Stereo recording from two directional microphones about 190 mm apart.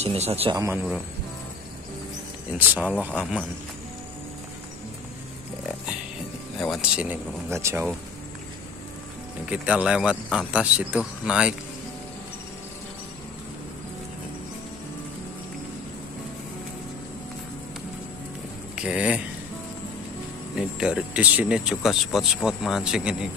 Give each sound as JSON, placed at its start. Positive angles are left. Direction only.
{"t": 0.0, "sound": "a man's voice", "side_deg": -35}
{"t": 0.6, "sound": "speech", "side_deg": -10}
{"t": 2.5, "sound": "speech", "side_deg": -5}
{"t": 6.7, "sound": "speech", "side_deg": -5}
{"t": 9.5, "sound": "speech", "side_deg": -5}
{"t": 18.8, "sound": "speech", "side_deg": -5}
{"t": 20.5, "sound": "speech", "side_deg": -5}